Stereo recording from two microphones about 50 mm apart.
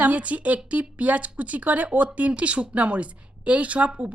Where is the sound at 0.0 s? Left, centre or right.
Right.